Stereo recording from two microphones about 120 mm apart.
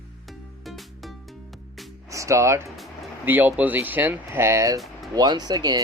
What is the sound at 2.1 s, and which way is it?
Speech, 25° right (ahead or behind).